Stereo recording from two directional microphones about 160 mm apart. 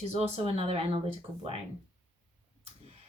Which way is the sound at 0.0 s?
40° right (ahead or behind).